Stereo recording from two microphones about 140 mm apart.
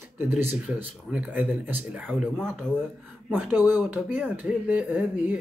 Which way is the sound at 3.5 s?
15° right (ahead or behind).